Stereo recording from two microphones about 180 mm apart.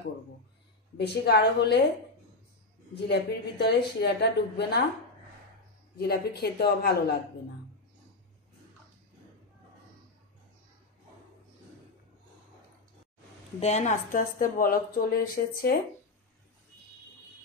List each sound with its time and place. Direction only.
0.9 s speech: 65° left (ahead or behind)
3.1 s speech: 65° left (ahead or behind)
5.9 s speech: 60° left (ahead or behind)
13.6 s a woman's voice: 40° left (ahead or behind); by 15.7 s 55° left (ahead or behind)